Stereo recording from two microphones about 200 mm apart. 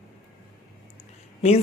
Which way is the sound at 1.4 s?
30° left (ahead or behind).